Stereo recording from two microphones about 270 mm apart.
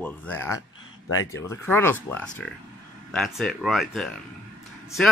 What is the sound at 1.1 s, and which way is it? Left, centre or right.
Speech, left.